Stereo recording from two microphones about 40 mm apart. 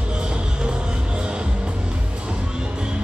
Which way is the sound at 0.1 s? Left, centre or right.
Right.